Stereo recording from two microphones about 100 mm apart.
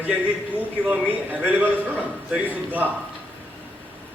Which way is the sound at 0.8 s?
15° right (ahead or behind).